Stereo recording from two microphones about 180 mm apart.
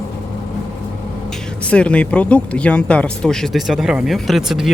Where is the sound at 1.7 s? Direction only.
5° left (ahead or behind).